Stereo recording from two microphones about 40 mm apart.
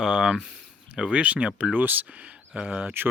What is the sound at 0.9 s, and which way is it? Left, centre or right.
Speech, right.